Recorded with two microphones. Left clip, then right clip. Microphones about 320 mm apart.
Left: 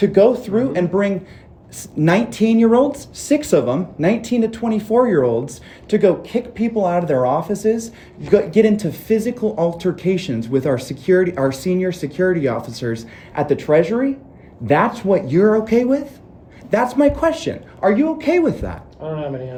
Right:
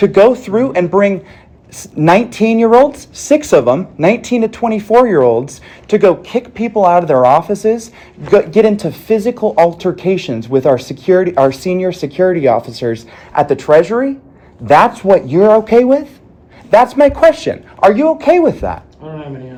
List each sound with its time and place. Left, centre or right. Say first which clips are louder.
0.0 s speech: right 5 dB; centre